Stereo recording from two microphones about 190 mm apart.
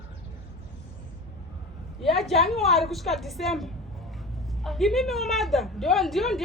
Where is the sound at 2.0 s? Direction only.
Centre (ahead or behind).